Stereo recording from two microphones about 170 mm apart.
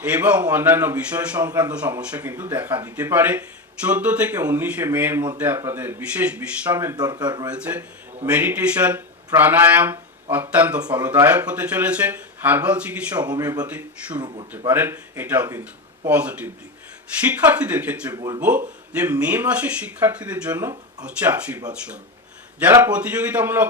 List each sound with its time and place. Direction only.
0.0 s speech: 10° right (ahead or behind); by 7.5 s 25° right (ahead or behind)
7.5 s speech: 10° right (ahead or behind)
13.2 s speech: 20° right (ahead or behind)
13.7 s speech: 10° right (ahead or behind)
14.2 s speech: 30° right (ahead or behind)
14.7 s speech: 15° right (ahead or behind)
18.1 s speech: 25° right (ahead or behind)
19.2 s speech: 10° right (ahead or behind)
22.6 s speech: 10° right (ahead or behind)